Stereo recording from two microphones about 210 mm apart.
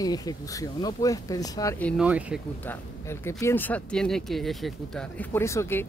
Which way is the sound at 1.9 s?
5° right (ahead or behind).